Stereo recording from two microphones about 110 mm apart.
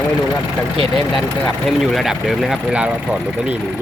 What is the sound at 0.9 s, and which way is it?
Speech, centre (ahead or behind).